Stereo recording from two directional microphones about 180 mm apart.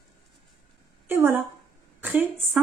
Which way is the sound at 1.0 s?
15° right (ahead or behind).